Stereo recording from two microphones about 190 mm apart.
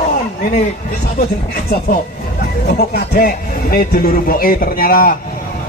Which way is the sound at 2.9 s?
50° left (ahead or behind).